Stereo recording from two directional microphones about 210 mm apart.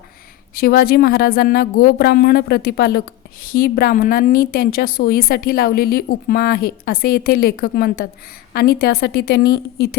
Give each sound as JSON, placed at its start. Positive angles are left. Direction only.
{"t": 0.5, "sound": "a woman's voice", "side_deg": 45}